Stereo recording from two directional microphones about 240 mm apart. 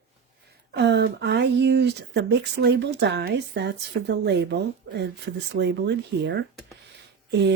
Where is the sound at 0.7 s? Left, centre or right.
Right.